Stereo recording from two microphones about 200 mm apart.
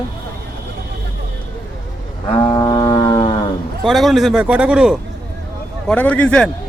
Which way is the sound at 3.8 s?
Centre (ahead or behind).